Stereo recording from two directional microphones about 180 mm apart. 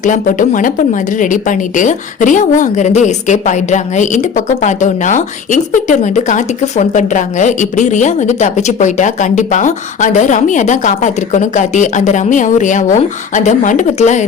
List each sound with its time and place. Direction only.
0.0 s a woman's voice: 45° left (ahead or behind)